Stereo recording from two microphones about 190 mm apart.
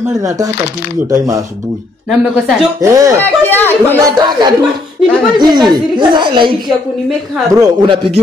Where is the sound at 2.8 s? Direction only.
15° right (ahead or behind).